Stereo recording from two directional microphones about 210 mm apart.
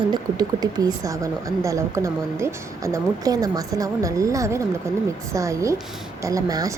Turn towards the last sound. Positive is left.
turn(degrees=-15)  # may be behind; listen again after turning